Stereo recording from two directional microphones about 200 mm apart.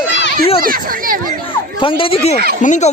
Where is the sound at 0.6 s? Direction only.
45° right (ahead or behind).